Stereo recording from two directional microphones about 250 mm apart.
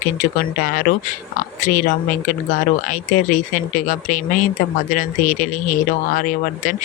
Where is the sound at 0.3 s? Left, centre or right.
Left.